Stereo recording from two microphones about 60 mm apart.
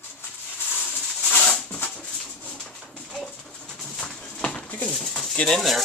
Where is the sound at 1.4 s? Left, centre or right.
Centre.